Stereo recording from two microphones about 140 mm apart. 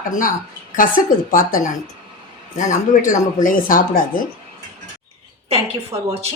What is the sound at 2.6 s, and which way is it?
Speech, 65° left (ahead or behind).